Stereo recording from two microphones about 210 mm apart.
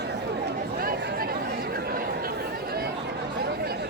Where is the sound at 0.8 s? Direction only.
45° right (ahead or behind).